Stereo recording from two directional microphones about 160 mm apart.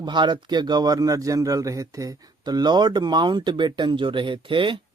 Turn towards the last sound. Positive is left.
turn(degrees=-30)  # may be behind; listen again after turning